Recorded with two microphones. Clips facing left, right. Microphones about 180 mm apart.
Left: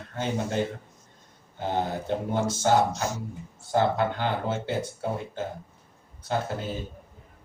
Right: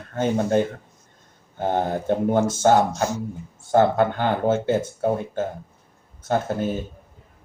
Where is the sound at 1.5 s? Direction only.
50° right (ahead or behind).